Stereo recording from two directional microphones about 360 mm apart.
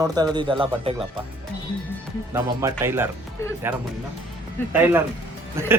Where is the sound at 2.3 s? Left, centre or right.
Centre.